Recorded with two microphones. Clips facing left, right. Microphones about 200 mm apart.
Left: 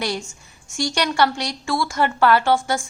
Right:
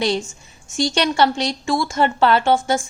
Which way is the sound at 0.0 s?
20° right (ahead or behind).